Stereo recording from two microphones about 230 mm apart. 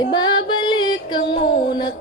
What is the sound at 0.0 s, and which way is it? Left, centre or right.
Music, centre.